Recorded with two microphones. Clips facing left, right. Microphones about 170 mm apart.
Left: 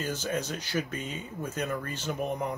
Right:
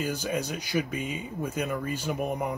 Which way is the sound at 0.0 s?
10° right (ahead or behind).